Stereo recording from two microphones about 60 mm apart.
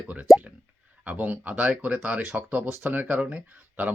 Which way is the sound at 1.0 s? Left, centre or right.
Right.